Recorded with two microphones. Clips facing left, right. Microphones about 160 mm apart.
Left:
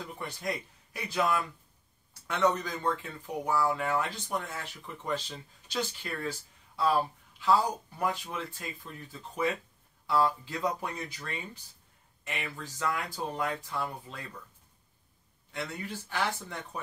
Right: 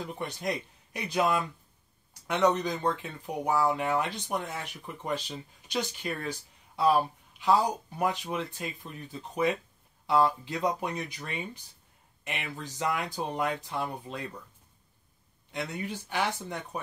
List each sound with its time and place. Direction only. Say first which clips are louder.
0.0 s speech: right 3 dB; 20° right (ahead or behind)
2.4 s speech: right 2 dB; 20° right (ahead or behind)
15.5 s speech: right 3 dB; 20° right (ahead or behind)